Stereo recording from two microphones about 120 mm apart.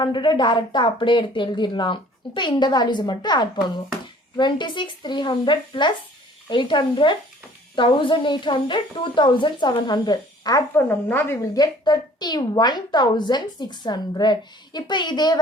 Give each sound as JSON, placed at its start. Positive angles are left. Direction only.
{"t": 0.0, "sound": "a woman's voice", "side_deg": 40}
{"t": 10.8, "sound": "a woman's voice", "side_deg": 20}
{"t": 11.5, "sound": "a woman's voice", "side_deg": 35}